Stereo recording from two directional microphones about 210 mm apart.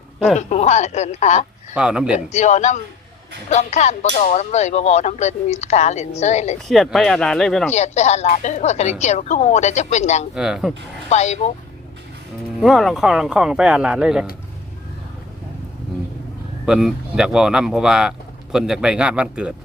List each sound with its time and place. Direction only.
0.3 s speech: 35° left (ahead or behind)
1.7 s speech: 5° right (ahead or behind)
2.3 s speech: 35° left (ahead or behind)
6.7 s speech: centre (ahead or behind)
7.7 s speech: 30° left (ahead or behind)
10.3 s speech: 5° right (ahead or behind)
11.1 s speech: 35° left (ahead or behind)
12.5 s speech: centre (ahead or behind)
16.6 s speech: 5° right (ahead or behind)